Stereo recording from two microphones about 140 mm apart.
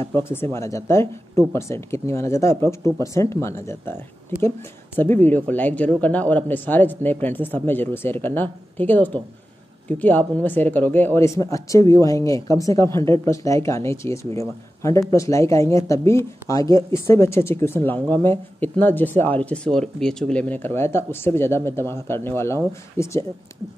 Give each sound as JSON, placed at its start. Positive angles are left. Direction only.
{"t": 0.0, "sound": "speech", "side_deg": 15}